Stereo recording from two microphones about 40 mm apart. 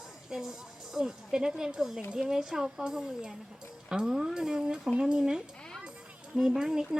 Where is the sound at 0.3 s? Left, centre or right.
Centre.